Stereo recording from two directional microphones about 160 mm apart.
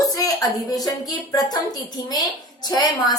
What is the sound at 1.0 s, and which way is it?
A woman's voice, 25° left (ahead or behind).